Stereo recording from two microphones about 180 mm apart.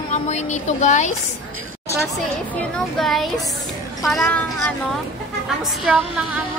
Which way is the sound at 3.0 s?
Centre (ahead or behind).